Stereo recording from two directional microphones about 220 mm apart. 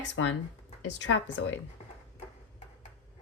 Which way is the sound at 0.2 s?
65° left (ahead or behind).